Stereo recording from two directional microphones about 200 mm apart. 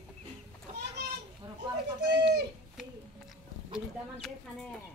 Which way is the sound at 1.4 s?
20° right (ahead or behind).